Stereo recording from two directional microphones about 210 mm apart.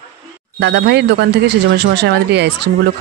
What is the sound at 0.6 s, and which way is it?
Speech, 55° right (ahead or behind).